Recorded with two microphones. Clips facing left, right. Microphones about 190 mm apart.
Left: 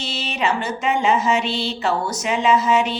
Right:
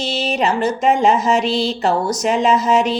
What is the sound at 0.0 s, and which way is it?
Music, 40° right (ahead or behind).